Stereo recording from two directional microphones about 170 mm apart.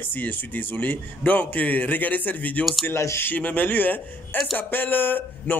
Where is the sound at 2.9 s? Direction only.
15° left (ahead or behind).